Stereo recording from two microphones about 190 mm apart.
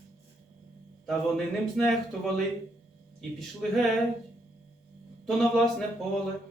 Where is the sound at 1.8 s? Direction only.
Centre (ahead or behind).